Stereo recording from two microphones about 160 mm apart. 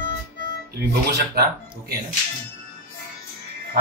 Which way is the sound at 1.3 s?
80° right.